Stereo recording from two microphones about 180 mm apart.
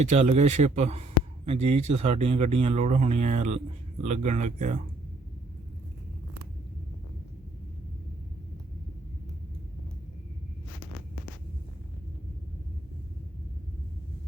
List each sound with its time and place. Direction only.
0.1 s speech: 40° right (ahead or behind)